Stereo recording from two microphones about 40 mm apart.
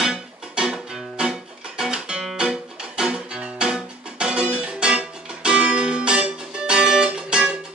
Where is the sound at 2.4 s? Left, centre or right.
Centre.